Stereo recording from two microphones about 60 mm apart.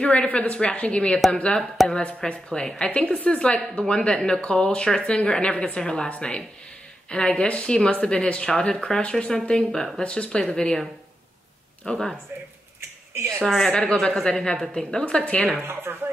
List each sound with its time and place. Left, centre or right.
0.0 s a woman's voice: left
11.8 s speech: centre
13.1 s a woman's voice: right
13.7 s speech: centre
15.6 s speech: right